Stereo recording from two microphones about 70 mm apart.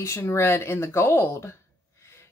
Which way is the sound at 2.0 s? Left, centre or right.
Left.